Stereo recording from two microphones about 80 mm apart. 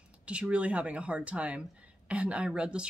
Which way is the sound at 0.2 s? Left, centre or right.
Centre.